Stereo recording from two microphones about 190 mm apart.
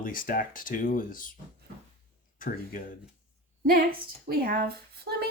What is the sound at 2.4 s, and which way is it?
Speech, 45° left (ahead or behind).